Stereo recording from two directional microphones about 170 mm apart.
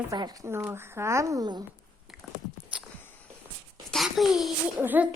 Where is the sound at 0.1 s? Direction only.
20° right (ahead or behind).